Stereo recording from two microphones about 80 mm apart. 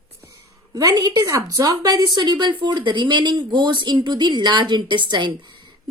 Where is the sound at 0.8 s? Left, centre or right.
Right.